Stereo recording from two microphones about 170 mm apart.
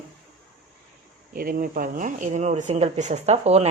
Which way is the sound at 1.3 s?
55° right (ahead or behind).